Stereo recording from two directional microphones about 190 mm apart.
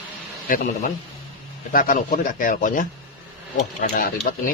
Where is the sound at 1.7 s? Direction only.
45° left (ahead or behind).